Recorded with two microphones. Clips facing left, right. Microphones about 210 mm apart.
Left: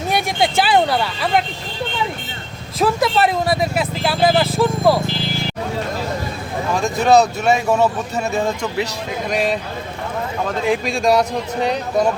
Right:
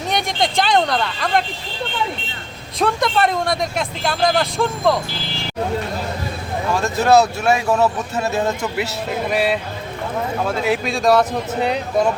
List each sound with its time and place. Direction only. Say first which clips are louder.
0.1 s speech: left 2 dB; 5° left (ahead or behind)
2.7 s speech: left 2 dB; 5° left (ahead or behind)
6.8 s speech: left 1 dB; 15° left (ahead or behind)
7.8 s speech: even; 5° right (ahead or behind)